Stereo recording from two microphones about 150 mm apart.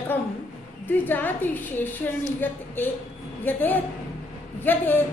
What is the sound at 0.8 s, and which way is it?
Speech, 10° left (ahead or behind).